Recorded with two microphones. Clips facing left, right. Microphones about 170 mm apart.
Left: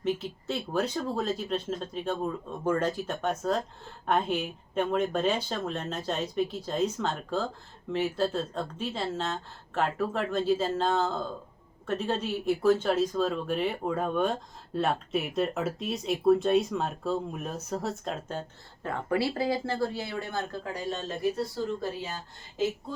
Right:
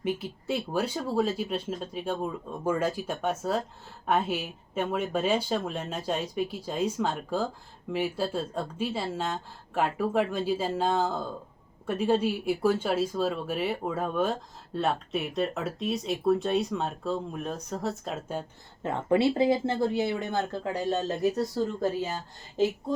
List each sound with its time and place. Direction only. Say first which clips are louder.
0.0 s speech: left 1 dB; 10° right (ahead or behind)
18.8 s speech: right 4 dB; 20° right (ahead or behind)
21.3 s speech: right 3 dB; 40° right (ahead or behind)